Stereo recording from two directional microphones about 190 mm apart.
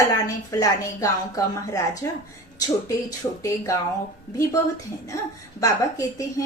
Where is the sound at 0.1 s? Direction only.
20° left (ahead or behind).